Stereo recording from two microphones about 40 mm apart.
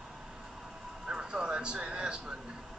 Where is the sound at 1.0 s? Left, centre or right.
Right.